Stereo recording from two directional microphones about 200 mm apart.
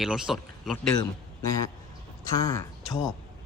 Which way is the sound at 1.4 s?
15° left (ahead or behind).